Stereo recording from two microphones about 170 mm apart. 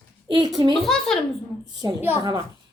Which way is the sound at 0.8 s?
5° left (ahead or behind).